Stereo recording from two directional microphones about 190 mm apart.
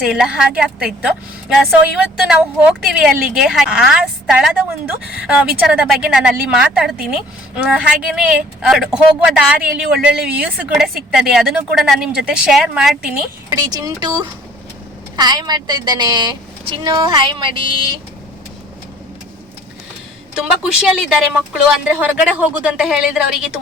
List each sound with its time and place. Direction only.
0.0 s a woman's voice: 5° right (ahead or behind)
13.5 s a woman's voice: 20° right (ahead or behind)
20.3 s a woman's voice: 5° right (ahead or behind)